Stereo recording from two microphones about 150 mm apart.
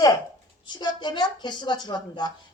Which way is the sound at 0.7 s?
30° left (ahead or behind).